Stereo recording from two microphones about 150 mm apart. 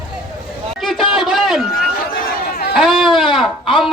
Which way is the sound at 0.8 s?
Centre (ahead or behind).